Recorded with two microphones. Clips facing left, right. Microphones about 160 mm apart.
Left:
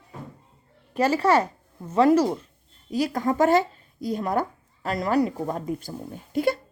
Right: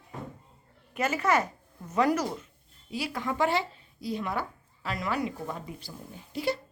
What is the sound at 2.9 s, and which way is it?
Speech, 40° left (ahead or behind).